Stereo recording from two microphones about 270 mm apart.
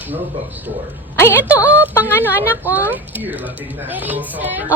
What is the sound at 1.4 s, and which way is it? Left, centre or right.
A woman's voice, centre.